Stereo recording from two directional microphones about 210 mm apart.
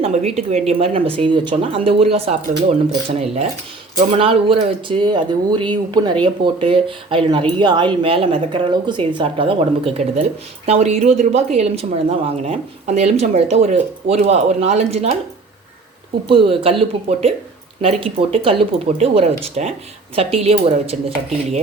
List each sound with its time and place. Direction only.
0.0 s speech: 30° right (ahead or behind)
4.2 s a woman's voice: 25° right (ahead or behind)
16.2 s speech: 25° right (ahead or behind)